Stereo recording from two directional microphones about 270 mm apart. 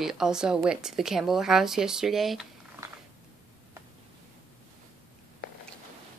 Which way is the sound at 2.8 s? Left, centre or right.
Centre.